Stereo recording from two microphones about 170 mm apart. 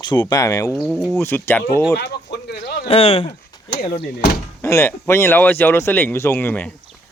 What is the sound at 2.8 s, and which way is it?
Speech, 40° left (ahead or behind).